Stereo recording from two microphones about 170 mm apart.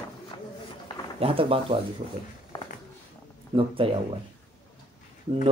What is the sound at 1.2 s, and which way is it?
Speech, 30° right (ahead or behind).